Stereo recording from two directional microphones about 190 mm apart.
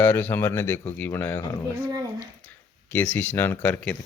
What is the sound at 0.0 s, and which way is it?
A man's voice, 10° left (ahead or behind).